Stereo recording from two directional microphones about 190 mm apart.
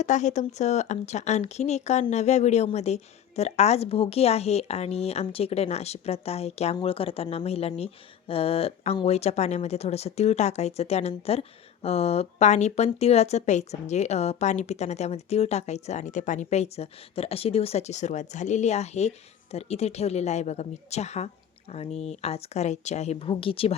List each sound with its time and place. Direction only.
0.0 s a woman's voice: 40° left (ahead or behind)